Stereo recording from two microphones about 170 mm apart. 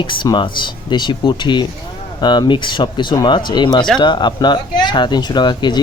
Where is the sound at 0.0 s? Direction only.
30° left (ahead or behind).